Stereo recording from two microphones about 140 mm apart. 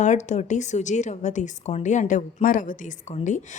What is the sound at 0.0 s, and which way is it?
Speech, 60° left (ahead or behind).